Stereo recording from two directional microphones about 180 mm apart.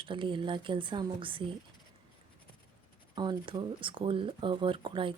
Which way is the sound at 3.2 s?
25° right (ahead or behind).